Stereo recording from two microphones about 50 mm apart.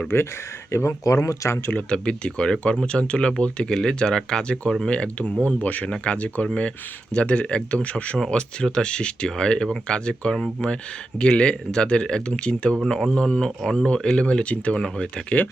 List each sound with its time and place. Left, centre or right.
0.1 s speech: left
0.7 s speech: left
1.9 s speech: centre
14.8 s speech: centre